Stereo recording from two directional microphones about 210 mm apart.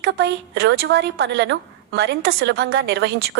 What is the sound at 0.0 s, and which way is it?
A woman's voice, 50° right (ahead or behind).